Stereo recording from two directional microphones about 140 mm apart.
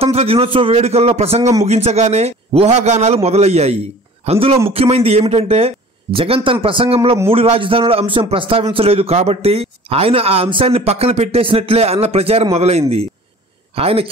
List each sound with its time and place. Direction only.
0.0 s a man's voice: 45° right (ahead or behind)